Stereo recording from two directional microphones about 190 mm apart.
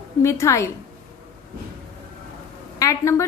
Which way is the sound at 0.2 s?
15° left (ahead or behind).